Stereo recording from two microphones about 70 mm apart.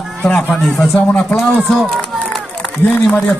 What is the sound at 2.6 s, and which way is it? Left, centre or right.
Speech, left.